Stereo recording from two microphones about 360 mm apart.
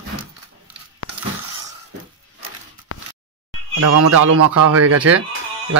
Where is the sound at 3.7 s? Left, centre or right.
Right.